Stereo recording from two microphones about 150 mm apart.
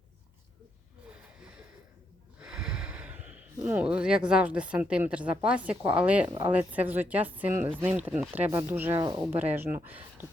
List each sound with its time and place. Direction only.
2.4 s snort: 5° right (ahead or behind)
4.3 s a woman's voice: 10° right (ahead or behind)
6.2 s speech: 30° right (ahead or behind)
6.5 s a woman's voice: 10° right (ahead or behind)
9.0 s speech: 30° right (ahead or behind)
9.4 s a woman's voice: 15° right (ahead or behind)